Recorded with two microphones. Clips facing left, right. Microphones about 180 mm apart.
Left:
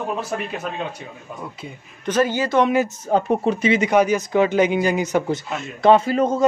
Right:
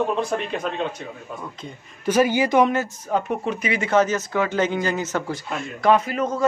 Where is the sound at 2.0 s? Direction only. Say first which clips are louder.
Right 1 dB; 10° right (ahead or behind).